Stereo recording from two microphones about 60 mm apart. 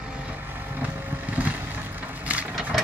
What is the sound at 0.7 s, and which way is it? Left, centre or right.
Vehicle, right.